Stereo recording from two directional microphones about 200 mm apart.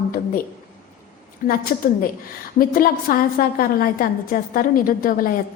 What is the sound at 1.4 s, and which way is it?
A woman's voice, 45° left (ahead or behind).